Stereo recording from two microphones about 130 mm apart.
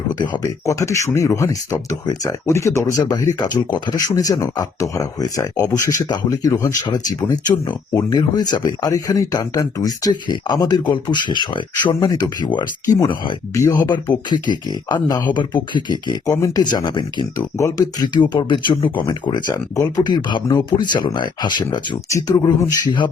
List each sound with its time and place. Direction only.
0.1 s speech: 30° left (ahead or behind)
19.0 s speech: 30° left (ahead or behind)